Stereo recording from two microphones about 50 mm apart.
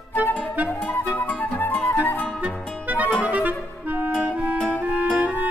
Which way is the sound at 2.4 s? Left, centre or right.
Right.